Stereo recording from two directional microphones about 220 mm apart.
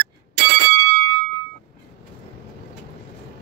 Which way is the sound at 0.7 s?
50° right (ahead or behind).